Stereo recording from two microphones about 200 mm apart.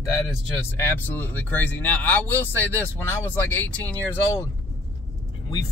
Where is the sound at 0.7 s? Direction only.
10° left (ahead or behind).